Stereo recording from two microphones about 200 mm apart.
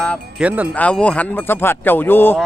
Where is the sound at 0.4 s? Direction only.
5° right (ahead or behind).